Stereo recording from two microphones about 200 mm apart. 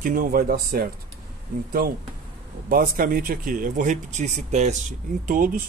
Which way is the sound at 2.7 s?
45° right (ahead or behind).